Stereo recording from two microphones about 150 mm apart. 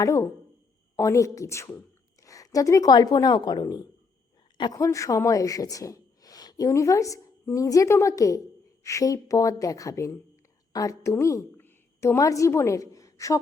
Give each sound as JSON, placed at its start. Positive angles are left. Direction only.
{"t": 0.0, "sound": "a woman's voice", "side_deg": 20}